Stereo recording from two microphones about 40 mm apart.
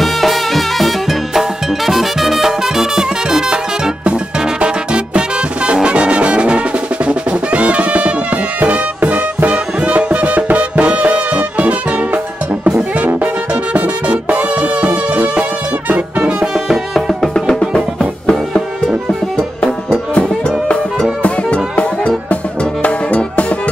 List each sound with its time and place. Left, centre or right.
0.0 s music: centre
4.6 s music: right
13.7 s music: right
16.5 s music: centre
21.2 s music: left